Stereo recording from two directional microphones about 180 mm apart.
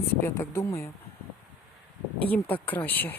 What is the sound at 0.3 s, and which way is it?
Speech, 15° left (ahead or behind).